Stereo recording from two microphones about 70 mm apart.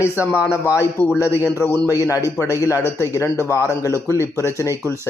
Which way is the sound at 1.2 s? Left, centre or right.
Left.